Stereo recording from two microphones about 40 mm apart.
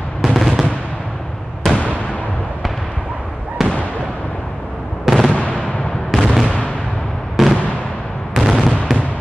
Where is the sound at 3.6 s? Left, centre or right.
Centre.